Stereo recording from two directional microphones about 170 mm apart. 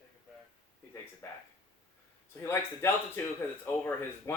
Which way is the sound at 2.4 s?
15° left (ahead or behind).